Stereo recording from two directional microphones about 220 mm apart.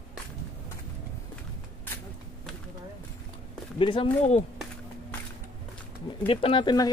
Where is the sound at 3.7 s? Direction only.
25° left (ahead or behind).